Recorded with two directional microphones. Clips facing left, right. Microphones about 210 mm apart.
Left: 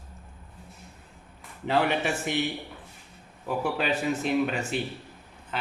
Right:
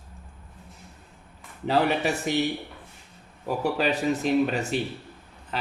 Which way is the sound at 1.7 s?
35° right (ahead or behind).